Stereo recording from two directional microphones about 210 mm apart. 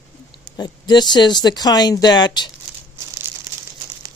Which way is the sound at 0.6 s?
20° left (ahead or behind).